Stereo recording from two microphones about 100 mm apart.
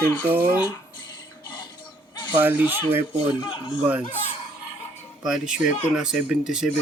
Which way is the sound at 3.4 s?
50° left (ahead or behind).